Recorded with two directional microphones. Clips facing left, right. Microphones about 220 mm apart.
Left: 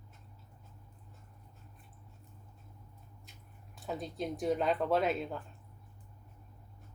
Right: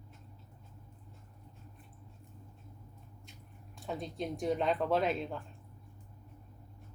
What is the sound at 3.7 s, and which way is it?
Speech, centre (ahead or behind).